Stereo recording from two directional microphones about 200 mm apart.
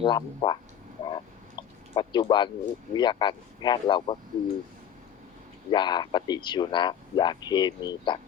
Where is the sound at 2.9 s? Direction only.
20° left (ahead or behind).